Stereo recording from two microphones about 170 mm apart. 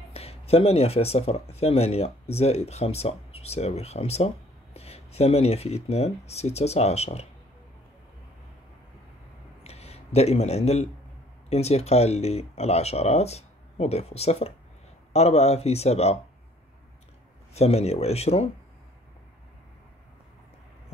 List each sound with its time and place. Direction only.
0.1 s speech: 35° left (ahead or behind)
9.6 s a sound: 40° left (ahead or behind)
11.4 s speech: 40° left (ahead or behind)
17.6 s speech: 40° left (ahead or behind)